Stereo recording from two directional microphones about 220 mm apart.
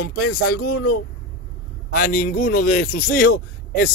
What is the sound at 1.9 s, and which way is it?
A man's voice, 40° left (ahead or behind).